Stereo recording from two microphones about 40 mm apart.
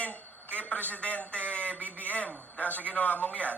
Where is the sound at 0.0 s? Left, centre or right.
Left.